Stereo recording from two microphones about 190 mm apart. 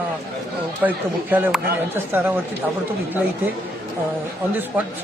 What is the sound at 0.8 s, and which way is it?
Speech, 10° right (ahead or behind).